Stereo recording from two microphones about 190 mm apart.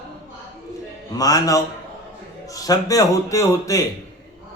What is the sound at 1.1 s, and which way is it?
A man's voice, 20° left (ahead or behind).